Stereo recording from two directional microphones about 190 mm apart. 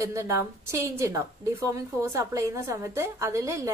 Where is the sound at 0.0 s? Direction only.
15° right (ahead or behind).